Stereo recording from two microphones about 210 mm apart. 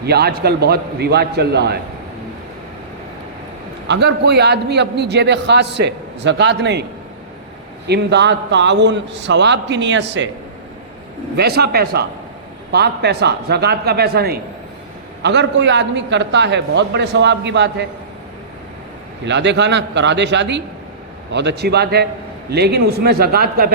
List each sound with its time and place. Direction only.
0.0 s a man's voice: 50° right (ahead or behind)
3.8 s a man's voice: 55° right (ahead or behind)
7.9 s a man's voice: 55° right (ahead or behind)
11.3 s a man's voice: 50° right (ahead or behind)
19.2 s a man's voice: 55° right (ahead or behind)